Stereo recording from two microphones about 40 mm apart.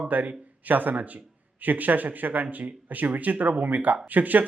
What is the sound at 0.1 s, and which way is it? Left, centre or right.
Speech, right.